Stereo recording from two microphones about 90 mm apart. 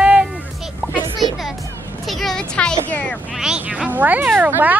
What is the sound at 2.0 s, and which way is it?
Speech, centre (ahead or behind).